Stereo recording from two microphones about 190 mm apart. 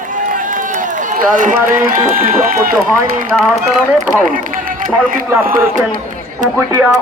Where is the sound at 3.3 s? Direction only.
Centre (ahead or behind).